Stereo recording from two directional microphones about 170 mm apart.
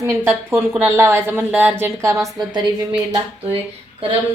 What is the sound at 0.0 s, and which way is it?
A woman's voice, 15° right (ahead or behind).